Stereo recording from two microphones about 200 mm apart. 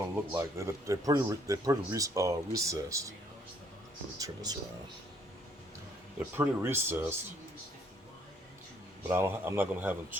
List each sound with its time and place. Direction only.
0.3 s speech: 15° right (ahead or behind)
4.2 s speech: 15° right (ahead or behind)
6.1 s speech: 10° right (ahead or behind)
9.0 s speech: 10° right (ahead or behind)